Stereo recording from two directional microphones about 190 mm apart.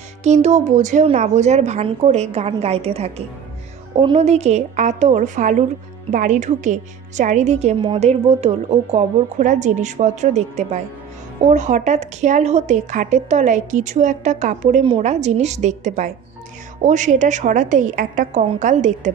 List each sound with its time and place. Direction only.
0.2 s a woman's voice: 35° right (ahead or behind)